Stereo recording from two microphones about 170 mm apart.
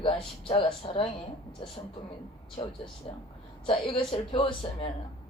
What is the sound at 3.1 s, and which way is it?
A woman's voice, 35° left (ahead or behind).